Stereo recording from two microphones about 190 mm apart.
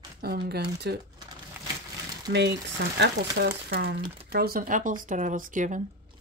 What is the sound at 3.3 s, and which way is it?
Speech, 60° right (ahead or behind).